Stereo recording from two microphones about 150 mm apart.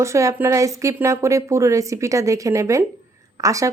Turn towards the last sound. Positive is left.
turn(degrees=-20)  # may be behind; listen again after turning